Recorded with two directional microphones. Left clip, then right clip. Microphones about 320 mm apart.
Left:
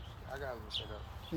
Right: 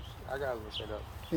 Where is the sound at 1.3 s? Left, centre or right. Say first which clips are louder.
Right 8 dB; centre.